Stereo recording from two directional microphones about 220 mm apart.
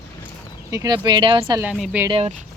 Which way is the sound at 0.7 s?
15° right (ahead or behind).